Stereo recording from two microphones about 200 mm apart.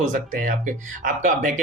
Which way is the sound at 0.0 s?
40° right (ahead or behind).